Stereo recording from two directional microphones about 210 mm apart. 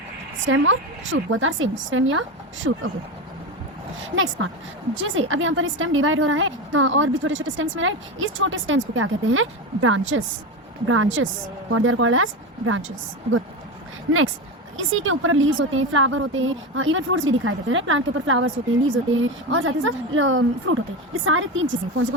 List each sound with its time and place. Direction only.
0.4 s a woman's voice: 65° right (ahead or behind)
2.6 s speech: 90° right
4.9 s a woman's voice: 65° right (ahead or behind)
10.8 s a woman's voice: 80° right
14.8 s a woman's voice: 70° right (ahead or behind)